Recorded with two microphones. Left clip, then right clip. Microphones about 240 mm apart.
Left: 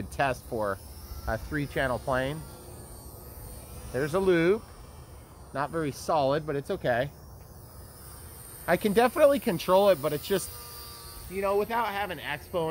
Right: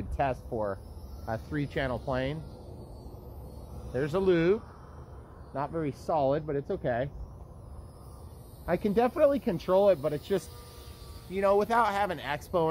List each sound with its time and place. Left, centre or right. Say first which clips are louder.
0.2 s speech: left 2 dB; left
1.2 s speech: left 2 dB; left
3.9 s speech: left 2 dB; left
5.5 s speech: left 2 dB; left
8.6 s speech: left 3 dB; left
11.3 s speech: right 3 dB; right